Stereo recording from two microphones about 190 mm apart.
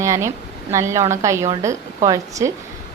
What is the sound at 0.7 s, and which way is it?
A woman's voice, 15° right (ahead or behind).